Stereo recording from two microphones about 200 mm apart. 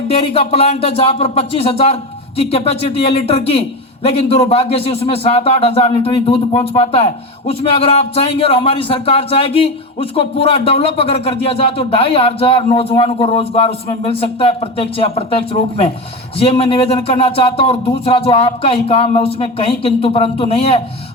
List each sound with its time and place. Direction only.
0.1 s speech: 30° left (ahead or behind)